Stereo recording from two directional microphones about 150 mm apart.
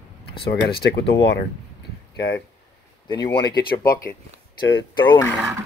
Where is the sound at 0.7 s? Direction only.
90° left.